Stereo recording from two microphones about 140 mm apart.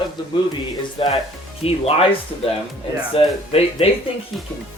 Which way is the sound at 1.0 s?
40° left (ahead or behind).